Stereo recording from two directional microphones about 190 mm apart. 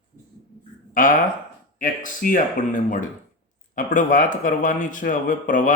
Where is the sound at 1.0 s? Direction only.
45° left (ahead or behind).